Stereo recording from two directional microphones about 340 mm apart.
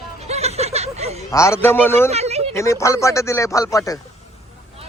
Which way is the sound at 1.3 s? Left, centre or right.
Centre.